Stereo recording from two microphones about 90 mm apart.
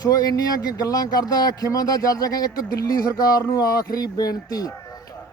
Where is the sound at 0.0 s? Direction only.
45° left (ahead or behind).